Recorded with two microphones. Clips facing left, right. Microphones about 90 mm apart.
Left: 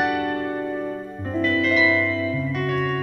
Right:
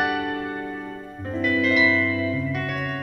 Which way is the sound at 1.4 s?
15° right (ahead or behind).